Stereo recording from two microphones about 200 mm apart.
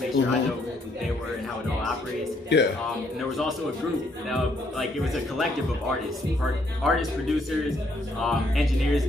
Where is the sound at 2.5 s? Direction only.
60° left (ahead or behind).